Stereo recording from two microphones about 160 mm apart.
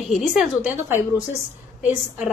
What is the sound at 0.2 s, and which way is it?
A woman's voice, centre (ahead or behind).